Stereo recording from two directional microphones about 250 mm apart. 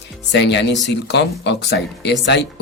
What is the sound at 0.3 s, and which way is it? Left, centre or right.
Speech, left.